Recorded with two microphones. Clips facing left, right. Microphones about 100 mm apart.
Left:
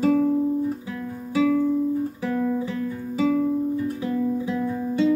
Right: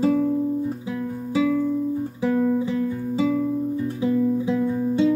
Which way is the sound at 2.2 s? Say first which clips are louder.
Right 4 dB; 20° right (ahead or behind).